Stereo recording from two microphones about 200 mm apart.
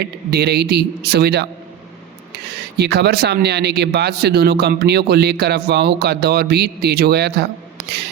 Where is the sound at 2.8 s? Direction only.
55° right (ahead or behind).